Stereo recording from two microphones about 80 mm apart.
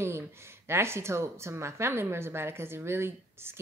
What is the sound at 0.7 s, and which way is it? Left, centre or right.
Speech, right.